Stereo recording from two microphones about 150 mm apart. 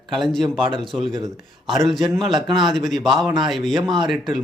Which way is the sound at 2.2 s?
35° right (ahead or behind).